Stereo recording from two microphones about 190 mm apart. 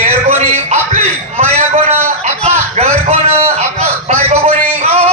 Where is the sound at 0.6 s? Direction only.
35° right (ahead or behind).